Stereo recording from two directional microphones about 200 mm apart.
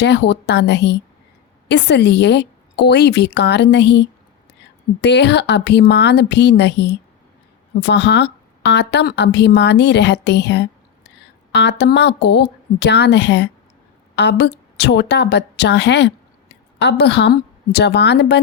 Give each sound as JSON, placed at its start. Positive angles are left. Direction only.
{"t": 0.0, "sound": "a woman's voice", "side_deg": 60}